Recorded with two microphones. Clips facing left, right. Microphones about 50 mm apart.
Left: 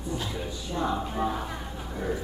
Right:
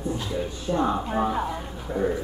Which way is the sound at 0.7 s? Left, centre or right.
Right.